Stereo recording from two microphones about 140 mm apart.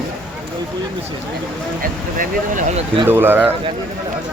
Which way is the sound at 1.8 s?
75° right (ahead or behind).